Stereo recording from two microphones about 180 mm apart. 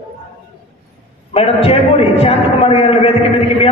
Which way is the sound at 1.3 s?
35° left (ahead or behind).